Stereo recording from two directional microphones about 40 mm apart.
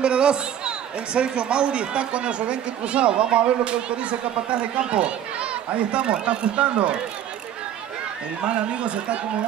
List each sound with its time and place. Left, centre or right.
0.0 s a man's voice: right
8.4 s a man's voice: right